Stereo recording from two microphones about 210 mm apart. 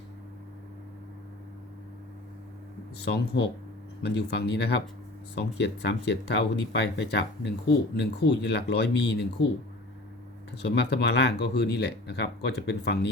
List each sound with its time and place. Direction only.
3.0 s speech: 50° left (ahead or behind)
10.5 s speech: 50° left (ahead or behind)